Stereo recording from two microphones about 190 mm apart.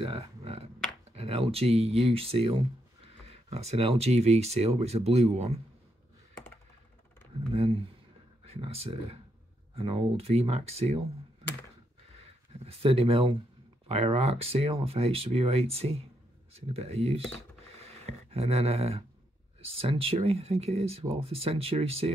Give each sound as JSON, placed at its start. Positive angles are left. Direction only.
{"t": 0.0, "sound": "a sound", "side_deg": -30}
{"t": 1.1, "sound": "speech", "side_deg": -30}
{"t": 7.5, "sound": "speech", "side_deg": -30}
{"t": 12.6, "sound": "speech", "side_deg": -30}
{"t": 17.7, "sound": "a sound", "side_deg": -35}
{"t": 19.6, "sound": "speech", "side_deg": -30}